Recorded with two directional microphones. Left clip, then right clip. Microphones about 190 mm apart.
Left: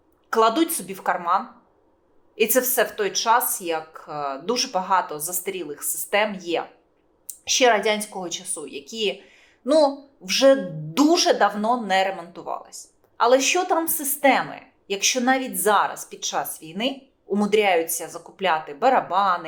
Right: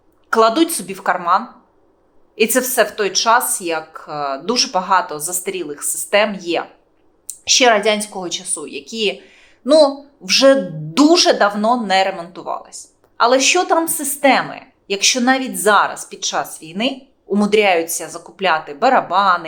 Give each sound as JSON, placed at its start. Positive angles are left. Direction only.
{"t": 0.4, "sound": "a woman's voice", "side_deg": -15}
{"t": 7.6, "sound": "speech", "side_deg": -15}
{"t": 12.4, "sound": "a woman's voice", "side_deg": 0}
{"t": 13.4, "sound": "speech", "side_deg": -15}
{"t": 13.9, "sound": "a woman's voice", "side_deg": 0}